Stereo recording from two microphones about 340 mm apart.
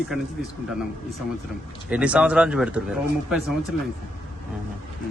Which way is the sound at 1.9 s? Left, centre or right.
Centre.